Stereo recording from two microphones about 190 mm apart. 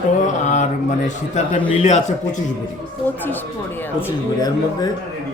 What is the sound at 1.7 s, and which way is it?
Mantra, 35° left (ahead or behind).